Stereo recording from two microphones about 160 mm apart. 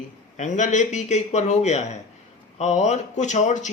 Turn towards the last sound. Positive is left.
turn(degrees=50)  # may be behind; listen again after turning